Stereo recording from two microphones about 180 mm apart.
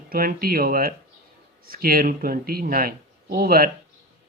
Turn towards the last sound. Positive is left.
turn(degrees=-55)  # may be behind; listen again after turning